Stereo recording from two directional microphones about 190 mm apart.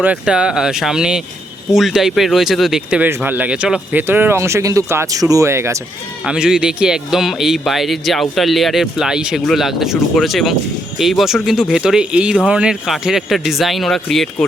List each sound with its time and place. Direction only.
0.0 s speech: 5° right (ahead or behind)
6.2 s speech: 5° right (ahead or behind)